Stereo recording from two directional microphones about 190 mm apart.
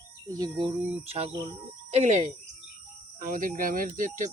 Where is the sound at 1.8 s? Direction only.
35° right (ahead or behind).